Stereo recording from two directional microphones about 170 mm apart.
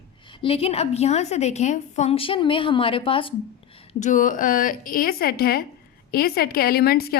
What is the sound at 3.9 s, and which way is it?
A woman's voice, 45° left (ahead or behind).